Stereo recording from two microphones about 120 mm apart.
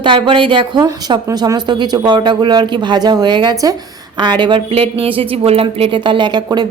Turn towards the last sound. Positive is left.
turn(degrees=-35)  # may be behind; listen again after turning